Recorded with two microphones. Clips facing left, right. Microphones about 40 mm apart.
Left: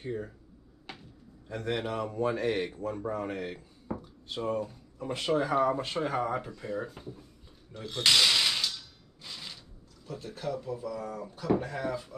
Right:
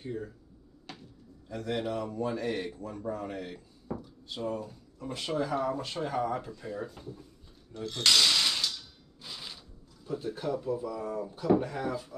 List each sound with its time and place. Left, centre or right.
0.0 s speech: left
0.9 s a sound: centre
1.6 s a man's voice: left; by 7.2 s centre
7.7 s a sound: centre
10.0 s speech: centre
11.5 s speech: centre